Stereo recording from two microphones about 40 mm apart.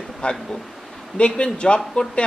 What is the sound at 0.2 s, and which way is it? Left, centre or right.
Speech, left.